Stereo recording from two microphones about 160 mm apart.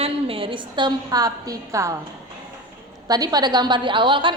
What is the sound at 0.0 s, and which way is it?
A woman's voice, 35° right (ahead or behind).